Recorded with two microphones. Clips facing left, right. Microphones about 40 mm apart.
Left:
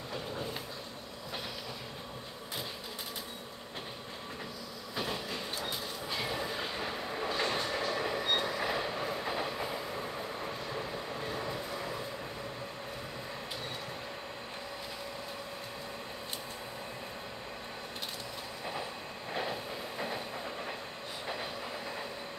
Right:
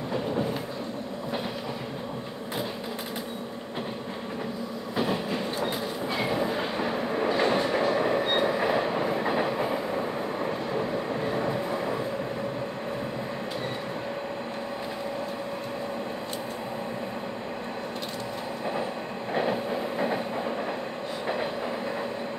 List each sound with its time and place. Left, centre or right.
4.9 s train: right
10.4 s vehicle: right
19.3 s train: right